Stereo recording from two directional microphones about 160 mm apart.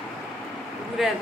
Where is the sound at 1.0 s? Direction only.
Centre (ahead or behind).